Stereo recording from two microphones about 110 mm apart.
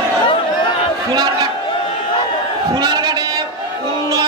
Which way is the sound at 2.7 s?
40° right (ahead or behind).